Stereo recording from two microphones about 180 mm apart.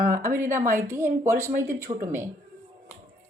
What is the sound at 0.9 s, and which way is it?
Speech, 15° right (ahead or behind).